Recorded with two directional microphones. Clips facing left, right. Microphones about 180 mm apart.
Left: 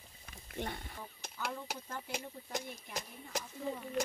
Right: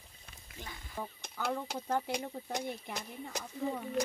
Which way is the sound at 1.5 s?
70° right (ahead or behind).